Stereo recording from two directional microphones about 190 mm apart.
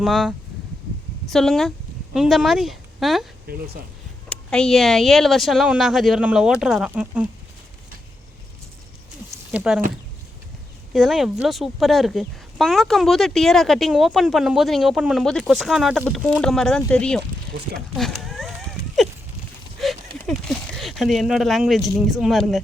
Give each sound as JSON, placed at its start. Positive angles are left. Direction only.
{"t": 0.0, "sound": "speech", "side_deg": 0}
{"t": 3.5, "sound": "speech", "side_deg": -50}
{"t": 4.3, "sound": "speech", "side_deg": 5}
{"t": 9.5, "sound": "speech", "side_deg": -5}
{"t": 10.9, "sound": "speech", "side_deg": 0}
{"t": 19.8, "sound": "a sound", "side_deg": 0}
{"t": 20.1, "sound": "speech", "side_deg": 0}